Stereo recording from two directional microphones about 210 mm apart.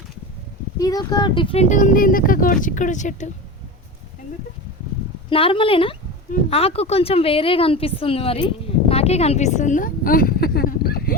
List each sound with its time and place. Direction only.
0.8 s speech: 15° left (ahead or behind)
1.7 s speech: 40° left (ahead or behind)
5.3 s a woman's voice: 25° left (ahead or behind); by 11.2 s 45° left (ahead or behind)